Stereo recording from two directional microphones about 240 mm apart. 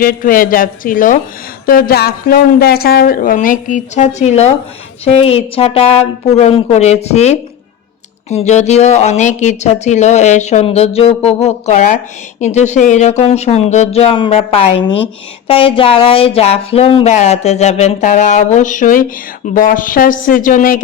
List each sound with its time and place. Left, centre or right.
0.0 s a woman's voice: left